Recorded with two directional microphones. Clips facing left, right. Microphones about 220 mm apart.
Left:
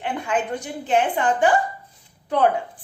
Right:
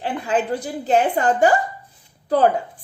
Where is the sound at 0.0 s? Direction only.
35° right (ahead or behind).